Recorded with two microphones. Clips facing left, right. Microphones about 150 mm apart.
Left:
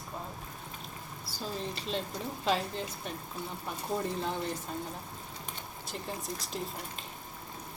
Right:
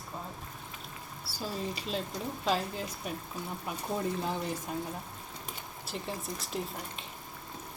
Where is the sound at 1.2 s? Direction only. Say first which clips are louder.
Right 1 dB; 10° right (ahead or behind).